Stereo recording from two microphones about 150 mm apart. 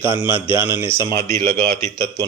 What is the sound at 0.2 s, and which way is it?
Speech, 15° right (ahead or behind).